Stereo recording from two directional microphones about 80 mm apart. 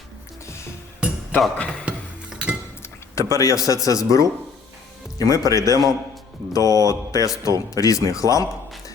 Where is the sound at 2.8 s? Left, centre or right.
Left.